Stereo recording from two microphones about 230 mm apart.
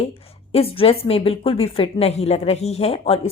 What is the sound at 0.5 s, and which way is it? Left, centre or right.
A woman's voice, left.